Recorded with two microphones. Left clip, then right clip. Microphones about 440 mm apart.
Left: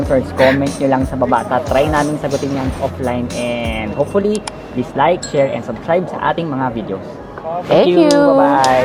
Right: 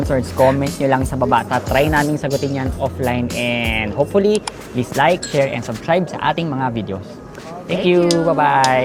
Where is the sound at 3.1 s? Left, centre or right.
Right.